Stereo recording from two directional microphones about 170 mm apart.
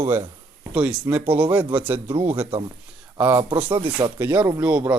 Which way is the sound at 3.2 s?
10° right (ahead or behind).